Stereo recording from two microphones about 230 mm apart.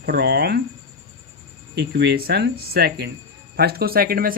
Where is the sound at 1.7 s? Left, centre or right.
Right.